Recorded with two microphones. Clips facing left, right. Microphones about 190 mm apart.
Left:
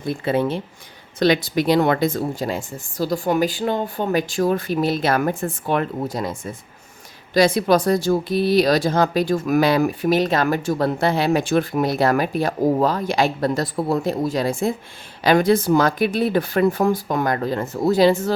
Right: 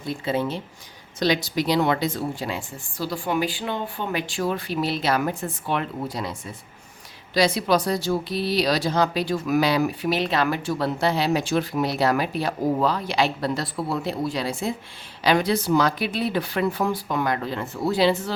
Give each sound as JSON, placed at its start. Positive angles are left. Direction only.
{"t": 0.0, "sound": "speech", "side_deg": 55}